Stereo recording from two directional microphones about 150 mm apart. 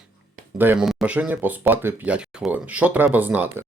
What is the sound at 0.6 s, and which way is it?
Speech, 15° right (ahead or behind).